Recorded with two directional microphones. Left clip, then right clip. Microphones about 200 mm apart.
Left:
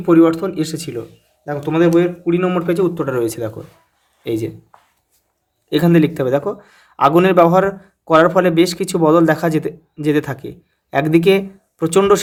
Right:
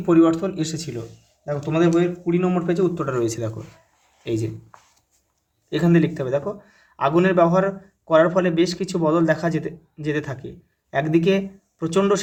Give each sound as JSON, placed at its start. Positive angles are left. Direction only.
{"t": 0.0, "sound": "speech", "side_deg": 25}
{"t": 5.6, "sound": "speech", "side_deg": 35}